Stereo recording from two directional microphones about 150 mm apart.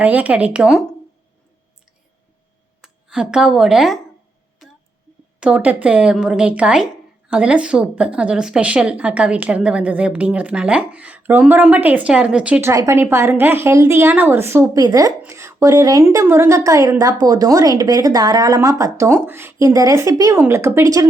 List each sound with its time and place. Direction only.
0.0 s a woman's voice: 10° right (ahead or behind)
2.8 s speech: 5° right (ahead or behind)
5.4 s a woman's voice: 5° right (ahead or behind)